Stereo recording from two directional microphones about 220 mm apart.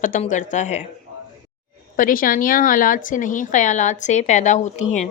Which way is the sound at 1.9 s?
40° left (ahead or behind).